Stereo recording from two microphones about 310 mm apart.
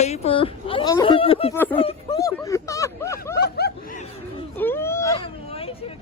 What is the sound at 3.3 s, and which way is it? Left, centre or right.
Snicker, left.